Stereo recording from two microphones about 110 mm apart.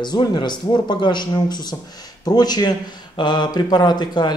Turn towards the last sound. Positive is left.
turn(degrees=40)  # may be behind; listen again after turning